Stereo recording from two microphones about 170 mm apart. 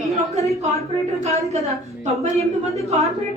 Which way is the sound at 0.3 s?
40° right (ahead or behind).